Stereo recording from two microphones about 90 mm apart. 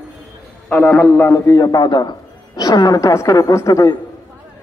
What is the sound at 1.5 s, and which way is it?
A man's voice, 45° left (ahead or behind).